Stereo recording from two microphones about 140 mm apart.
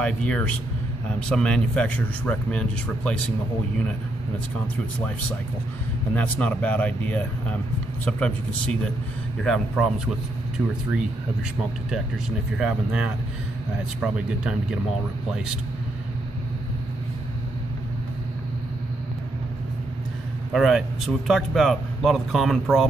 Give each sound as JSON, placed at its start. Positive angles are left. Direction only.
{"t": 0.0, "sound": "speech", "side_deg": 10}
{"t": 6.1, "sound": "speech", "side_deg": 10}
{"t": 12.5, "sound": "speech", "side_deg": -5}
{"t": 20.5, "sound": "speech", "side_deg": 0}